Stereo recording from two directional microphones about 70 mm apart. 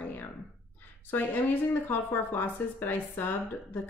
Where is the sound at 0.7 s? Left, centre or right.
Left.